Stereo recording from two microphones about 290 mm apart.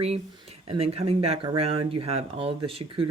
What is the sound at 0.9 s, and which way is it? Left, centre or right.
Speech, right.